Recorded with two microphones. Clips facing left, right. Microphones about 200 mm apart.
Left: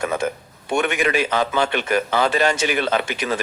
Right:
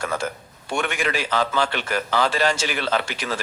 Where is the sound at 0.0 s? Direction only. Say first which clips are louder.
Left 4 dB; 20° left (ahead or behind).